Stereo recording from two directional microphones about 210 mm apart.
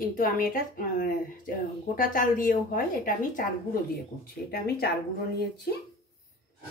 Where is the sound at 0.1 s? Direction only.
40° left (ahead or behind).